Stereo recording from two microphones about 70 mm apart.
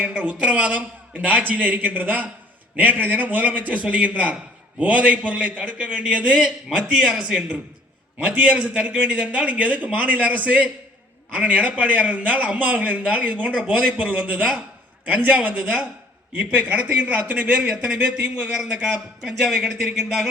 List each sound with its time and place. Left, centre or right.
0.0 s a man's voice: centre